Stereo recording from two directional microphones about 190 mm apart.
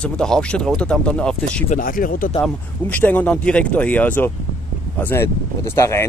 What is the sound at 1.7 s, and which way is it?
Speech, 50° left (ahead or behind).